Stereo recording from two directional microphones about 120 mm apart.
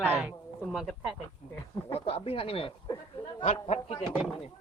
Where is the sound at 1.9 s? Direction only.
55° left (ahead or behind).